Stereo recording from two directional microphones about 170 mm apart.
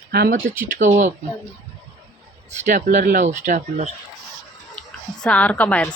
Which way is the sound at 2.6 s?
45° right (ahead or behind).